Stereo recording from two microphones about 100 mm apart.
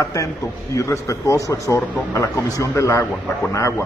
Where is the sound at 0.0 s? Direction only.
35° left (ahead or behind).